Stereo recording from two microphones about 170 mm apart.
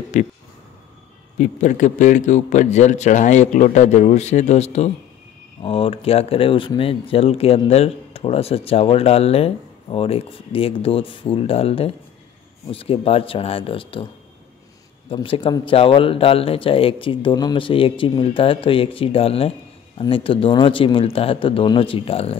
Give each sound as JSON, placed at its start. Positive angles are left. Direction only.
{"t": 0.1, "sound": "a man's voice", "side_deg": 45}
{"t": 1.4, "sound": "a man's voice", "side_deg": 45}
{"t": 15.0, "sound": "speech", "side_deg": 30}